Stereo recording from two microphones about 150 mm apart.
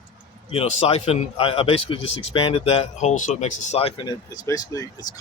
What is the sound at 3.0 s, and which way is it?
Speech, 50° left (ahead or behind).